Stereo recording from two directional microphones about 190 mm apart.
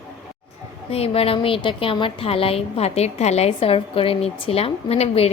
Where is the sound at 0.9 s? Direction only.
30° left (ahead or behind).